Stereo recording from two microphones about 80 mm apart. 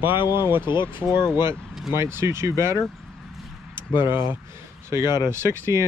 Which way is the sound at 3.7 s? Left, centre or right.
Left.